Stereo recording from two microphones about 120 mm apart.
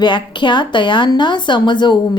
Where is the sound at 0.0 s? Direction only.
40° left (ahead or behind).